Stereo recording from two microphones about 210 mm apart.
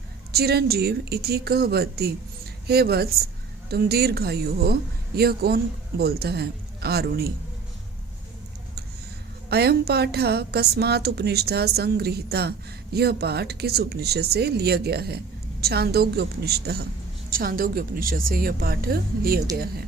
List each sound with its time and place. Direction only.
0.3 s a woman's voice: 50° right (ahead or behind)
9.5 s a woman's voice: 50° right (ahead or behind)